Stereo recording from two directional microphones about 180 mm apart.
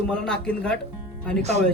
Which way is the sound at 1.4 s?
40° right (ahead or behind).